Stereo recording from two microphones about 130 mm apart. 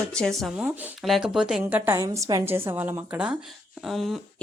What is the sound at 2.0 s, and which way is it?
A woman's voice, 25° right (ahead or behind).